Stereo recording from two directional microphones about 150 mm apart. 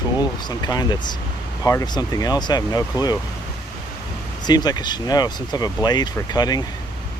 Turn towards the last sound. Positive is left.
turn(degrees=25)  # may be behind; listen again after turning